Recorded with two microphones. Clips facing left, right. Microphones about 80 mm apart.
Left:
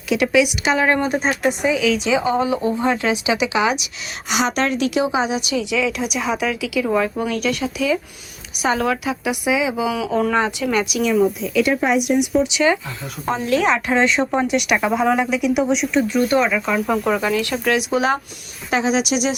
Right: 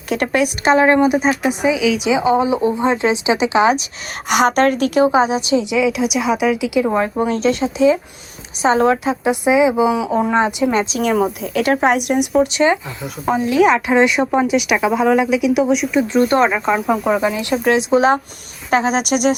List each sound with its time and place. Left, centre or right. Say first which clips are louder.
0.1 s a woman's voice: left 1 dB; right
0.9 s speech: right 5 dB; centre
1.2 s speech: right 3 dB; centre
2.1 s a woman's voice: right 3 dB; centre; by 3.8 s right
4.3 s a woman's voice: right 6 dB; right
6.0 s speech: right 5 dB; centre
6.6 s a woman's voice: right 3 dB; right
11.0 s a woman's voice: even; right
13.2 s speech: right 4 dB; centre
16.3 s a woman's voice: right 3 dB; right
16.8 s speech: right 3 dB; centre
17.6 s a woman's voice: right 8 dB; right
18.7 s speech: right 3 dB; right